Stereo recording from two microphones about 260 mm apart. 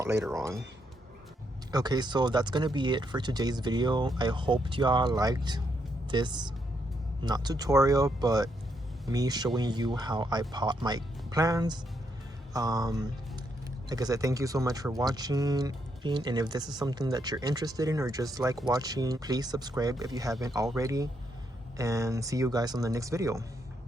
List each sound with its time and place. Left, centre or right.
0.0 s speech: centre
1.7 s speech: centre